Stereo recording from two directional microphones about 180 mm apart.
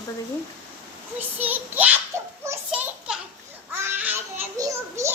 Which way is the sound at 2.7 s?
5° right (ahead or behind).